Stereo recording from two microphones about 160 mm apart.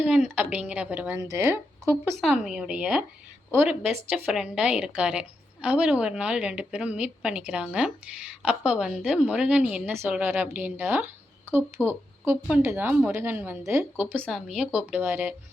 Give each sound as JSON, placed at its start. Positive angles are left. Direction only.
{"t": 0.0, "sound": "a woman's voice", "side_deg": -10}
{"t": 2.2, "sound": "a woman's voice", "side_deg": -5}